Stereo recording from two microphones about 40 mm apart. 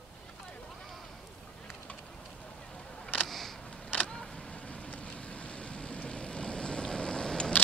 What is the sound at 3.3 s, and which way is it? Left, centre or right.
Camera, centre.